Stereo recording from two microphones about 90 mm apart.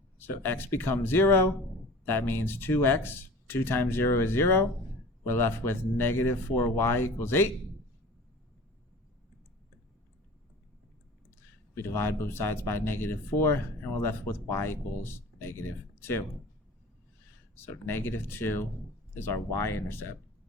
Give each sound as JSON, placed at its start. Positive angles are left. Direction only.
{"t": 0.2, "sound": "speech", "side_deg": 25}
{"t": 11.8, "sound": "speech", "side_deg": 25}
{"t": 17.7, "sound": "speech", "side_deg": 25}